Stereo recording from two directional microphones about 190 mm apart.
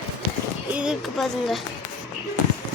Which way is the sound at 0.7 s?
5° right (ahead or behind).